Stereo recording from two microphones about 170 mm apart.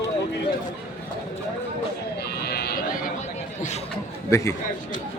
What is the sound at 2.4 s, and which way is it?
Sheep, 65° left (ahead or behind).